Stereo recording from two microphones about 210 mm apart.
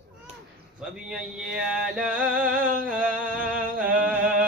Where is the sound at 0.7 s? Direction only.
5° right (ahead or behind).